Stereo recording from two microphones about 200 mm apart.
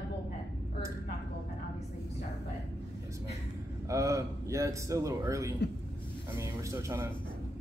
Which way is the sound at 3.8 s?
15° right (ahead or behind).